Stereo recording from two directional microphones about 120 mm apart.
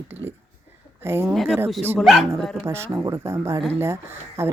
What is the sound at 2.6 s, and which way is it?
Speech, 20° right (ahead or behind).